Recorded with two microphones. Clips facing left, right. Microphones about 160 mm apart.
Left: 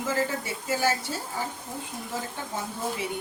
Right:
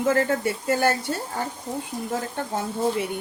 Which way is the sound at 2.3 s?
60° right (ahead or behind).